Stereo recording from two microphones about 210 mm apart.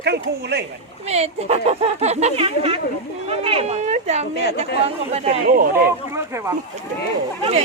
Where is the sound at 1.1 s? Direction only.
30° right (ahead or behind).